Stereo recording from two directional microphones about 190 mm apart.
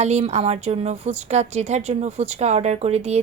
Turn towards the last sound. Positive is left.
turn(degrees=-35)  # may be behind; listen again after turning